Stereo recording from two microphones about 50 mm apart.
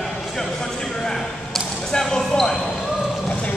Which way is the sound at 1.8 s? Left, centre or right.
Centre.